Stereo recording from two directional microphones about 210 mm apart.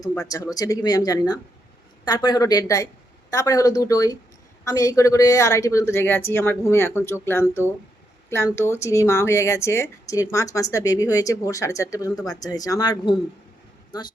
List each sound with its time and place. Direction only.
0.1 s speech: 15° left (ahead or behind)
8.5 s speech: 10° left (ahead or behind)